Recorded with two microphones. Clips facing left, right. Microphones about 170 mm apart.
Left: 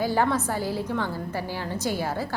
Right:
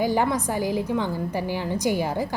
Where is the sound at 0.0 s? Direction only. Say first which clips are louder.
Right 1 dB; 15° right (ahead or behind).